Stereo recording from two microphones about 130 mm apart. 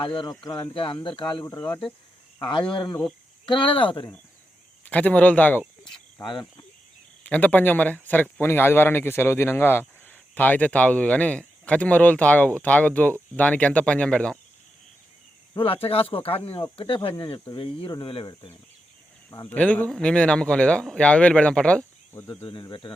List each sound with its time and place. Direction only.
0.0 s speech: 40° left (ahead or behind)
0.3 s speech: 30° left (ahead or behind)
0.7 s speech: 40° left (ahead or behind)
4.9 s speech: 10° left (ahead or behind)
7.3 s speech: 10° left (ahead or behind)
15.5 s speech: 45° left (ahead or behind)
19.5 s speech: 10° left (ahead or behind)
22.6 s speech: 35° left (ahead or behind)